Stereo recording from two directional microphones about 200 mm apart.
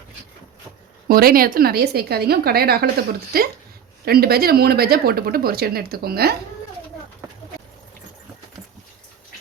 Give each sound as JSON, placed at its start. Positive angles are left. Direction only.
{"t": 1.0, "sound": "speech", "side_deg": -45}